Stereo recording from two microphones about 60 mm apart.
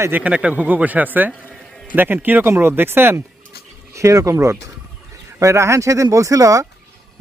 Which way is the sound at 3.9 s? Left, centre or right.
Right.